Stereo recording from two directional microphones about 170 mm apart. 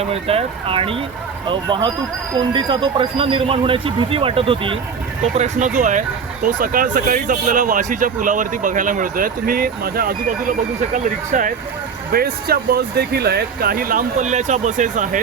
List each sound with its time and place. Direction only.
0.0 s speech: 35° right (ahead or behind)
5.3 s speech: 45° right (ahead or behind)
12.1 s speech: 65° right (ahead or behind); by 15.2 s 50° right (ahead or behind)